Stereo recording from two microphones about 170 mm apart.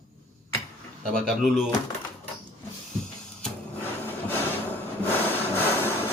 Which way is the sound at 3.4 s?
10° left (ahead or behind).